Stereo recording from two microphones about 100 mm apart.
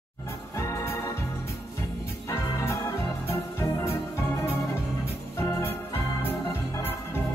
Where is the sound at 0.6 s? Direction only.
30° left (ahead or behind).